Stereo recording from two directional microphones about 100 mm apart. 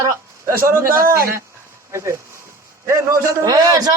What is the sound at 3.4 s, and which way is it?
Speech, 40° right (ahead or behind).